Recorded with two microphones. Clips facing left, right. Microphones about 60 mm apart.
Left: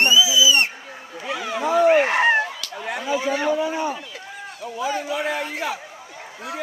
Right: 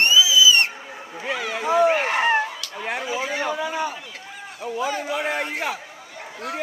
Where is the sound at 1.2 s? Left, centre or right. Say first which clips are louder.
Left 1 dB; right.